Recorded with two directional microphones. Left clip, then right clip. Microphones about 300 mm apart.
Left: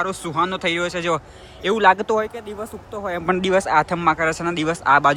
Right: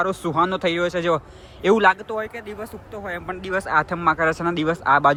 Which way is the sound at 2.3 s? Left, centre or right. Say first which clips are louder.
Left 2 dB; centre.